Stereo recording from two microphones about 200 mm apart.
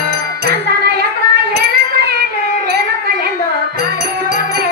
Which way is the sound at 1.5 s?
55° right (ahead or behind).